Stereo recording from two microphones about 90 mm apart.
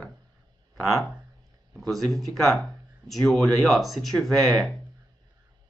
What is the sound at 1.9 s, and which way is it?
Speech, centre (ahead or behind).